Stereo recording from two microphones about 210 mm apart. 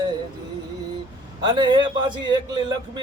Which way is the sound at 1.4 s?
20° right (ahead or behind).